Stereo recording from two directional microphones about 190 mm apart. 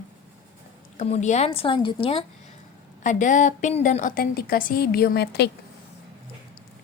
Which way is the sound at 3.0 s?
40° left (ahead or behind).